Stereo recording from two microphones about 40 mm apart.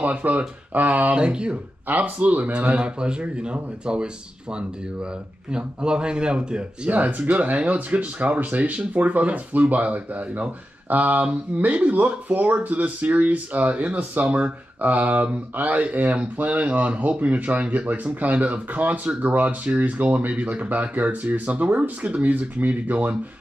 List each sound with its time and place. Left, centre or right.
0.0 s speech: right
1.1 s speech: right
1.9 s speech: right
2.5 s speech: right
6.9 s speech: right